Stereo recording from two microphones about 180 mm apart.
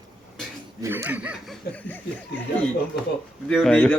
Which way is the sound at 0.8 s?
10° right (ahead or behind).